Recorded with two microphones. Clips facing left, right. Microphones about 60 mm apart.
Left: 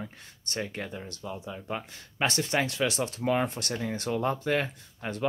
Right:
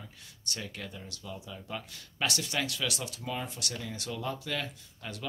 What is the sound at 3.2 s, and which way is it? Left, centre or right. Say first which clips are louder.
Speech: left 11 dB; left.